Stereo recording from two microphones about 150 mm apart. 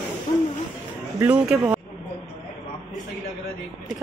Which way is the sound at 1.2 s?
10° right (ahead or behind).